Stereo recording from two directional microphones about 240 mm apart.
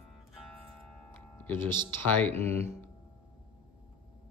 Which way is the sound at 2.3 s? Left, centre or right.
Right.